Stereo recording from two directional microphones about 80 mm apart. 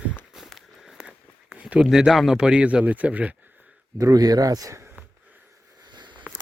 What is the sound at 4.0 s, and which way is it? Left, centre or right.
Speech, right.